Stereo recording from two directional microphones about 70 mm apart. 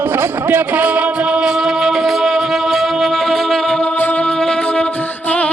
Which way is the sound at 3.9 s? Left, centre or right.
Left.